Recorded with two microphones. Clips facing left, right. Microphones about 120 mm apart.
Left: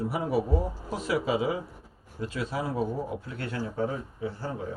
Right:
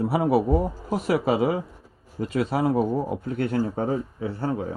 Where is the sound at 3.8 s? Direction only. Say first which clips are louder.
Right 6 dB; 85° right.